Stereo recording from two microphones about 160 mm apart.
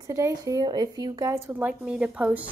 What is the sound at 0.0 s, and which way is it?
A woman's voice, 20° right (ahead or behind).